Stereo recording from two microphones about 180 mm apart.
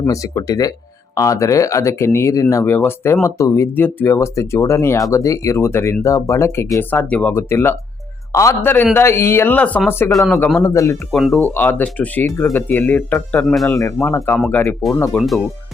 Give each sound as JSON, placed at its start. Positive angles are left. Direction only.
{"t": 0.0, "sound": "a man's voice", "side_deg": 15}
{"t": 10.6, "sound": "speech", "side_deg": 15}
{"t": 11.1, "sound": "a man's voice", "side_deg": 0}
{"t": 11.5, "sound": "speech", "side_deg": 10}
{"t": 13.7, "sound": "speech", "side_deg": 15}
{"t": 14.3, "sound": "a man's voice", "side_deg": 5}
{"t": 14.6, "sound": "speech", "side_deg": 15}